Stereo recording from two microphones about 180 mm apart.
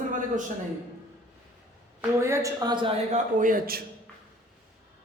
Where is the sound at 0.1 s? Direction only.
45° right (ahead or behind).